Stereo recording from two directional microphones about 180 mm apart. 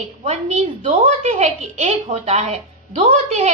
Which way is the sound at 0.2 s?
35° right (ahead or behind).